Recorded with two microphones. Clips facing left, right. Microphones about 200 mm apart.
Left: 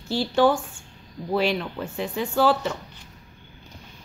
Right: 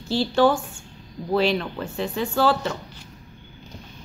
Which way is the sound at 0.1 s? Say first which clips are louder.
Right 1 dB; 15° left (ahead or behind).